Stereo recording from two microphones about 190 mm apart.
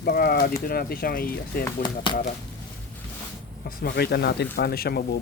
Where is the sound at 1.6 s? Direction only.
25° left (ahead or behind).